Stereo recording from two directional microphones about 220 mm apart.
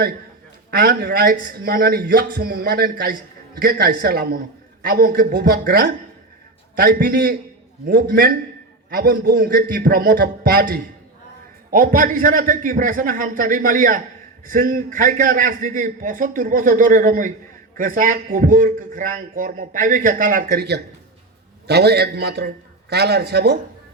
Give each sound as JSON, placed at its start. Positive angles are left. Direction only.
{"t": 0.7, "sound": "a man's voice", "side_deg": -45}